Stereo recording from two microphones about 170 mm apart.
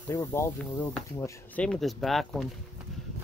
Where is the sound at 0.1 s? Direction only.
15° left (ahead or behind).